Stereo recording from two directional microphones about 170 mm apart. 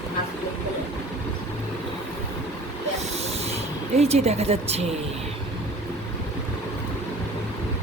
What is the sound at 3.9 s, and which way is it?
Speech, 40° right (ahead or behind).